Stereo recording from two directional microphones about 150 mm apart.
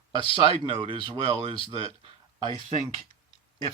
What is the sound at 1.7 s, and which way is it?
Speech, 40° right (ahead or behind).